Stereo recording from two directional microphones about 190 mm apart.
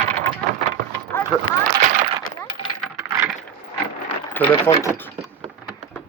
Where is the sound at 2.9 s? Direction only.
15° right (ahead or behind).